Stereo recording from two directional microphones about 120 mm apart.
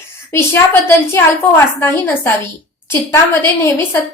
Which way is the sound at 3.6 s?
20° left (ahead or behind).